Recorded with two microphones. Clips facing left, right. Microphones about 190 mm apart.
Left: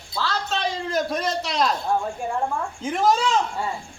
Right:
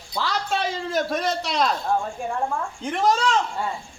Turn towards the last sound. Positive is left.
turn(degrees=0)  # may be behind; listen again after turning